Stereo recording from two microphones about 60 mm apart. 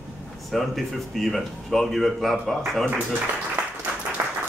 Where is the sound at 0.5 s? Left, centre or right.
Centre.